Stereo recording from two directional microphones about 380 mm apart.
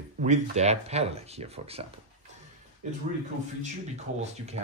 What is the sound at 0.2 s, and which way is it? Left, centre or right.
Speech, centre.